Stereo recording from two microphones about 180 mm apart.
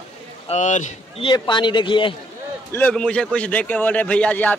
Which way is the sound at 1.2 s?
25° left (ahead or behind).